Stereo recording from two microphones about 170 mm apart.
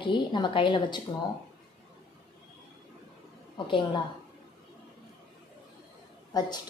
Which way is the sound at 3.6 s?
30° left (ahead or behind).